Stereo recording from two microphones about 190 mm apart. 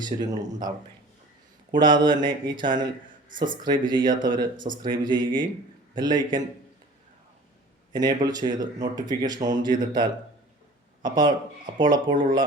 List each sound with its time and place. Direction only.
0.0 s speech: 20° right (ahead or behind)
1.8 s speech: 25° right (ahead or behind)
3.2 s speech: 45° right (ahead or behind)
3.5 s speech: 25° right (ahead or behind)
7.9 s speech: 20° right (ahead or behind)